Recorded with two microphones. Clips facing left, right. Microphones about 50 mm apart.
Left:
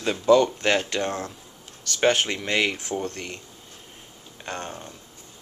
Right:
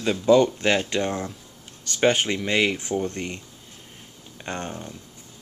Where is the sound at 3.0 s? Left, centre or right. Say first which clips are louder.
Right 3 dB; centre.